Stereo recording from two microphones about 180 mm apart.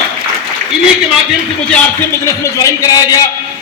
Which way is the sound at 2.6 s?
20° left (ahead or behind).